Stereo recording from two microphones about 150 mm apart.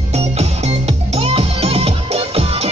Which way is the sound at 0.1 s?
45° right (ahead or behind).